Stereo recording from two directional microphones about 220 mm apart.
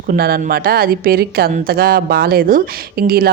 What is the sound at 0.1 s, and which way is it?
A woman's voice, 45° right (ahead or behind).